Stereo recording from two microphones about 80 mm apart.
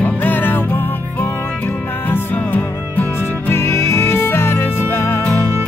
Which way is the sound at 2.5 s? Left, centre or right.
Left.